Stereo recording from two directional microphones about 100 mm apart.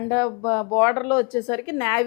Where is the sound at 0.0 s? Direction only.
20° left (ahead or behind).